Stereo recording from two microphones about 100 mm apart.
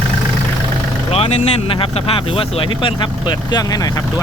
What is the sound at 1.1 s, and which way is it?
Speech, 85° left.